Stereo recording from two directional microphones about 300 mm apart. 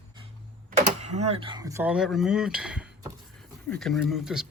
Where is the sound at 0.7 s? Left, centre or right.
Right.